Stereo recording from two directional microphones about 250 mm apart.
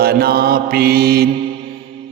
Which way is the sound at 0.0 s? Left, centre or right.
Right.